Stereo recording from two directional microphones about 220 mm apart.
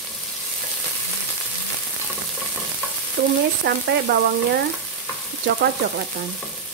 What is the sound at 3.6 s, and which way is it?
Speech, 45° right (ahead or behind).